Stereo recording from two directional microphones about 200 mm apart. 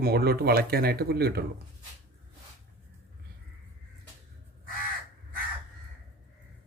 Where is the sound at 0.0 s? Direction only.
50° right (ahead or behind).